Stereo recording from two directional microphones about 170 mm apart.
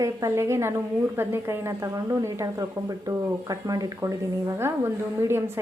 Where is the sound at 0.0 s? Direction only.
15° right (ahead or behind).